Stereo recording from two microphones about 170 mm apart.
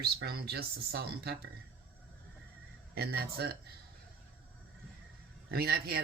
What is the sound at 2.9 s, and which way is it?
Speech, 65° right (ahead or behind).